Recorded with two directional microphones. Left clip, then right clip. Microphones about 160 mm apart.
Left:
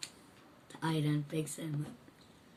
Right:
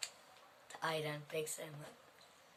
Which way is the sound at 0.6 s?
20° right (ahead or behind).